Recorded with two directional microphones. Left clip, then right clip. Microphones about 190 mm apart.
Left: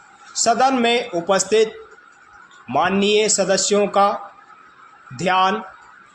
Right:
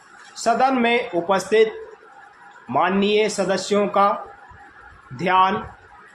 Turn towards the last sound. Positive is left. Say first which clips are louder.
# even
turn(degrees=40)  # may be behind; listen again after turning